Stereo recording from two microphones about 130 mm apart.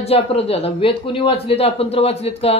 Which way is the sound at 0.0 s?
50° left (ahead or behind).